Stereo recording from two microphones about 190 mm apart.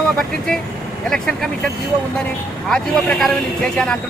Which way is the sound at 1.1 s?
5° left (ahead or behind).